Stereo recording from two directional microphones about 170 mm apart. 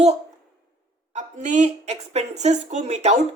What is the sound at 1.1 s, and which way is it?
A woman's voice, 45° right (ahead or behind).